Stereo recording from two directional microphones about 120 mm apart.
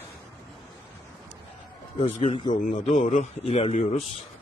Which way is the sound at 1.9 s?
55° left (ahead or behind).